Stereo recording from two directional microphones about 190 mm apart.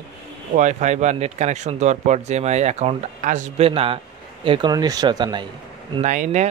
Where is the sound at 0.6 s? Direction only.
40° right (ahead or behind).